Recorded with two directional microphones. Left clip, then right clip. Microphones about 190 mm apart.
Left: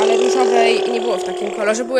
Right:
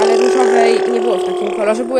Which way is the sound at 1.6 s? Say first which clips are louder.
Right 1 dB; 10° left (ahead or behind).